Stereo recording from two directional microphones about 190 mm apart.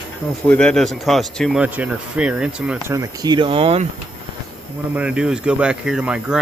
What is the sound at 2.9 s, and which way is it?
Speech, 20° right (ahead or behind).